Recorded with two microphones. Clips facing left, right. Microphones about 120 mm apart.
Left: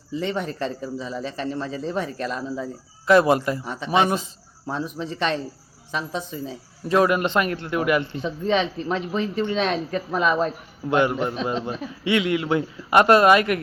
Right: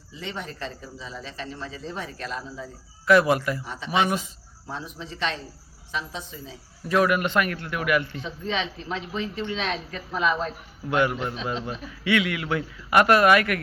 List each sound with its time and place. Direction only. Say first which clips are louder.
0.2 s speech: left 8 dB; 45° left (ahead or behind)
3.1 s speech: left 2 dB; 25° left (ahead or behind)
3.6 s speech: left 4 dB; 45° left (ahead or behind)
3.9 s speech: left 3 dB; 30° left (ahead or behind)
4.6 s speech: left 7 dB; 50° left (ahead or behind)
6.8 s speech: left 3 dB; 30° left (ahead or behind)
8.2 s speech: left 7 dB; 45° left (ahead or behind)
10.8 s speech: left 3 dB; 25° left (ahead or behind)